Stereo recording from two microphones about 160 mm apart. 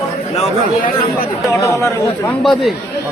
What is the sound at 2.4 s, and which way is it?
Speech, centre (ahead or behind).